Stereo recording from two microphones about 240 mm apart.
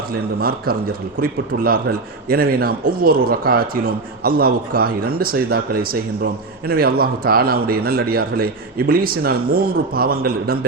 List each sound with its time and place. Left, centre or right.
0.3 s a man's voice: right